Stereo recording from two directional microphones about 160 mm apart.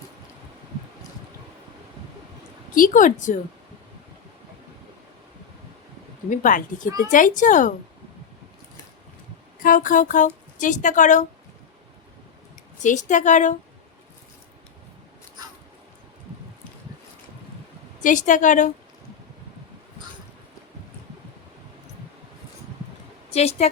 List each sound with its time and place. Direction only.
2.7 s speech: 55° left (ahead or behind)
6.3 s speech: 55° left (ahead or behind)
9.6 s speech: 55° left (ahead or behind)
12.8 s speech: 50° left (ahead or behind)
18.0 s speech: 50° left (ahead or behind)
23.3 s a woman's voice: 40° left (ahead or behind)